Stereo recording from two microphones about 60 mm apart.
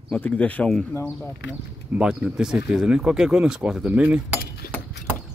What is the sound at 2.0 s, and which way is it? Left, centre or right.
Speech, centre.